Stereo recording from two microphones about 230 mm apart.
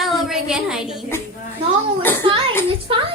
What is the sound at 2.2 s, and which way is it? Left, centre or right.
Speech, right.